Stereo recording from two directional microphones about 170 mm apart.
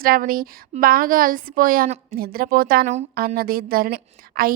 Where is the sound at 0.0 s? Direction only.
60° right (ahead or behind).